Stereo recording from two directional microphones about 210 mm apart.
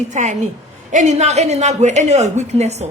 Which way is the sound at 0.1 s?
35° right (ahead or behind).